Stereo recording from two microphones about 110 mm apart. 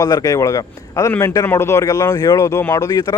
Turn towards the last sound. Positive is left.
turn(degrees=35)  # may be behind; listen again after turning